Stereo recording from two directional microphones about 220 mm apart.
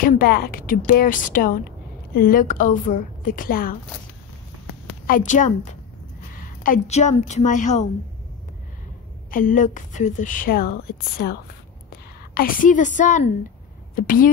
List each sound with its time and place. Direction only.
0.0 s a woman's voice: 40° left (ahead or behind)
5.0 s a woman's voice: 35° left (ahead or behind)
9.3 s a woman's voice: 35° left (ahead or behind)